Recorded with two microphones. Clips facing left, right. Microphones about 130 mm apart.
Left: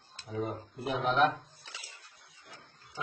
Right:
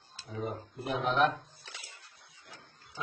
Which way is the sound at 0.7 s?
Centre (ahead or behind).